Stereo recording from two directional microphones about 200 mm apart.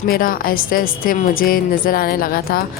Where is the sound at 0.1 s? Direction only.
45° left (ahead or behind).